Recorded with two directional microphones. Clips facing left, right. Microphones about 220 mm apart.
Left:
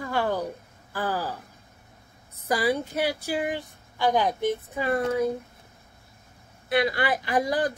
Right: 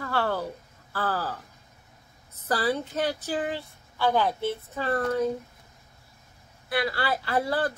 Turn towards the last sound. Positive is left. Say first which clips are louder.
# left 2 dB
turn(degrees=15)  # may be behind; listen again after turning